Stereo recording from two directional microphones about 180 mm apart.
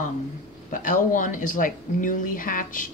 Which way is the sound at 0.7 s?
45° left (ahead or behind).